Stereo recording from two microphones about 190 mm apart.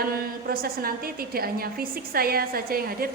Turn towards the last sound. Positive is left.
turn(degrees=-50)  # may be behind; listen again after turning